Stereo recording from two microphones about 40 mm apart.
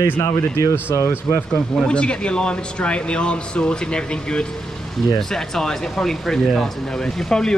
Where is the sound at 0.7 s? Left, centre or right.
Left.